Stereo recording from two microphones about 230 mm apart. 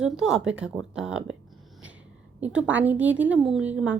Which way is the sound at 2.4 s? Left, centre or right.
Centre.